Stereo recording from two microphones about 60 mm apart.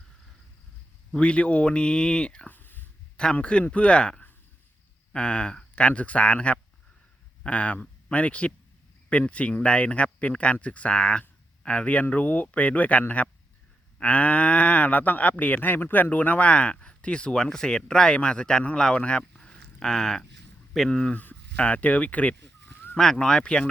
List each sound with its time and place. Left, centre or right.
1.1 s speech: centre
2.5 s a sound: left
3.3 s speech: left
23.0 s speech: centre